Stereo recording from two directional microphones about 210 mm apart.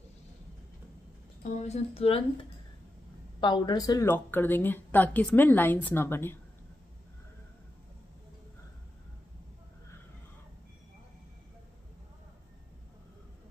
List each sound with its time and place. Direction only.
1.5 s speech: 30° left (ahead or behind)
3.3 s a woman's voice: 20° left (ahead or behind)